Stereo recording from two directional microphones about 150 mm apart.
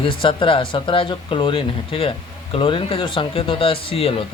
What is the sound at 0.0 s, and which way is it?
Speech, 35° left (ahead or behind).